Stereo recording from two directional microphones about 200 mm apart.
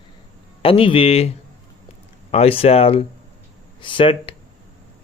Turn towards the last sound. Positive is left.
turn(degrees=25)  # may be behind; listen again after turning